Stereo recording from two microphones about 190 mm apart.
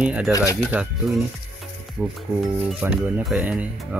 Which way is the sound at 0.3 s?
15° left (ahead or behind).